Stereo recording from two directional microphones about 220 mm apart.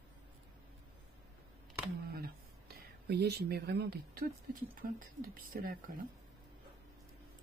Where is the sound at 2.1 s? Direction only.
45° right (ahead or behind).